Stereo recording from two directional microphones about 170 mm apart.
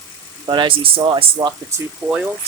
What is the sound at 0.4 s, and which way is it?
Speech, 30° right (ahead or behind).